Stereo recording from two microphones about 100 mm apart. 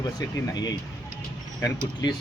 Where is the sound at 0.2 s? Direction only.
45° left (ahead or behind).